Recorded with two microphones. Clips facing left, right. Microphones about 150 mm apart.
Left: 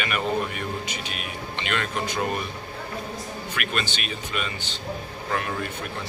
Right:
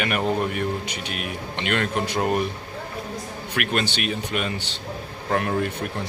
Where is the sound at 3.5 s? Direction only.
65° right (ahead or behind).